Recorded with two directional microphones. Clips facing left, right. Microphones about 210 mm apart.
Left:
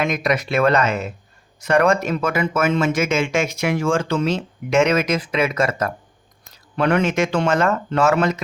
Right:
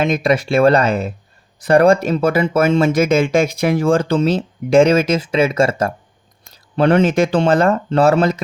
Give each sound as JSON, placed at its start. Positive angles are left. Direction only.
{"t": 0.0, "sound": "speech", "side_deg": -30}